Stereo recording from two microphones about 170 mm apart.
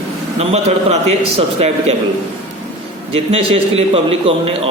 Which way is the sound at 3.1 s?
35° right (ahead or behind).